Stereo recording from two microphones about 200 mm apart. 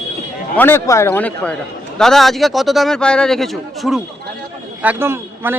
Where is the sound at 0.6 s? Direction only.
10° left (ahead or behind).